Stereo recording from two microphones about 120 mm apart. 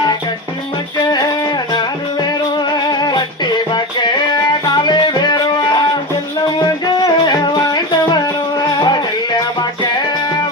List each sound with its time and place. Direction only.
1.0 s music: 35° left (ahead or behind)